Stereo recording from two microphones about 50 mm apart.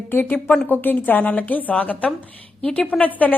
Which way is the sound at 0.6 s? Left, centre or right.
Left.